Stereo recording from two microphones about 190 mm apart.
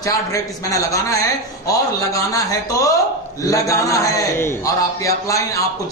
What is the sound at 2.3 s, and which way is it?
A man's voice, 20° left (ahead or behind).